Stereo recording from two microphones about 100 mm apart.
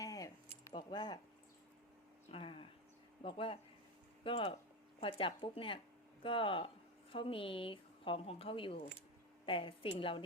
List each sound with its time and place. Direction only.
0.0 s keys jangling: 40° left (ahead or behind)
0.7 s keys jangling: 50° left (ahead or behind)
2.3 s a woman's voice: 65° left (ahead or behind)